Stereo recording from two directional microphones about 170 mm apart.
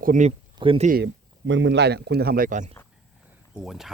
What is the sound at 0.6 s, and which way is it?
Speech, 30° right (ahead or behind).